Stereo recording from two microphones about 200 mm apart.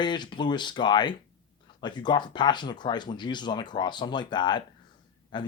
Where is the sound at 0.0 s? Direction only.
20° left (ahead or behind).